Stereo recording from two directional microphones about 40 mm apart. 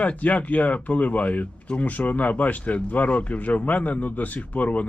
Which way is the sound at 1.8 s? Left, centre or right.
Left.